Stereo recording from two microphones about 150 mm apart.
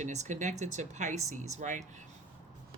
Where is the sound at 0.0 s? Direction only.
55° right (ahead or behind).